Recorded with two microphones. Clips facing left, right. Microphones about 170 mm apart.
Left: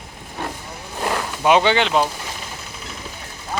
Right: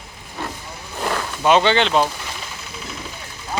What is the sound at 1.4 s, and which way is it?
Speech, 10° left (ahead or behind).